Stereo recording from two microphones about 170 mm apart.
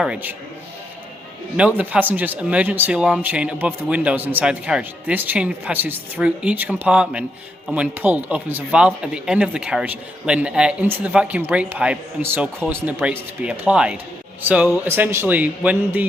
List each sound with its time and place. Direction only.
0.0 s speech: 10° right (ahead or behind)
1.5 s speech: 10° right (ahead or behind)